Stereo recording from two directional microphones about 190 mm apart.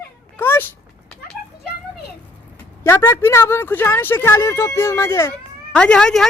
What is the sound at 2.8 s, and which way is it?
Speech, 15° left (ahead or behind).